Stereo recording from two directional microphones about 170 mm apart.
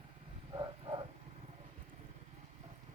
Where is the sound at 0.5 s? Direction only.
25° right (ahead or behind).